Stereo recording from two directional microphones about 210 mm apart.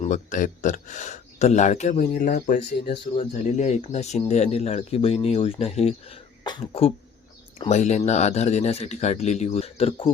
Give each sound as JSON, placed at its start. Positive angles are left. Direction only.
{"t": 0.0, "sound": "speech", "side_deg": 35}